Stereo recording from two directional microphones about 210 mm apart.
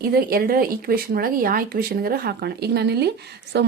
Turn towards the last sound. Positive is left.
turn(degrees=-50)  # may be behind; listen again after turning